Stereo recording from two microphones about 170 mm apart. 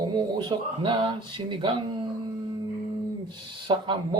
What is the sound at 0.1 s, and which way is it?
Speech, 25° right (ahead or behind).